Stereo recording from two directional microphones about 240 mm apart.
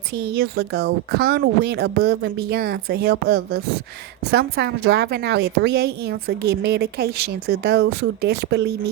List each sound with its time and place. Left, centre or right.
0.3 s a woman's voice: right